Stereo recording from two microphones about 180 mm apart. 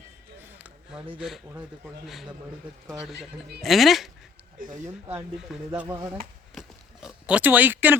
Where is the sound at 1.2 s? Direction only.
Centre (ahead or behind).